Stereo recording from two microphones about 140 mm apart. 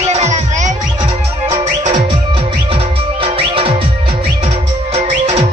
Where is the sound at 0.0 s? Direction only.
50° right (ahead or behind).